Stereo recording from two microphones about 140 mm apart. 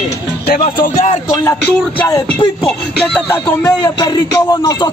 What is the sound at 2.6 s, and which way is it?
Music, 5° left (ahead or behind).